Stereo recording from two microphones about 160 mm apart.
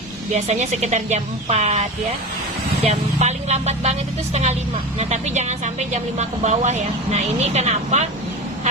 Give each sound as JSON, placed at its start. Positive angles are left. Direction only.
{"t": 0.3, "sound": "speech", "side_deg": -45}
{"t": 4.9, "sound": "speech", "side_deg": -45}